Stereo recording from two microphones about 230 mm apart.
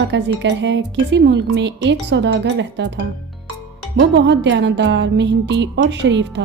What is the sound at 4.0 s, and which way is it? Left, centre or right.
Speech, right.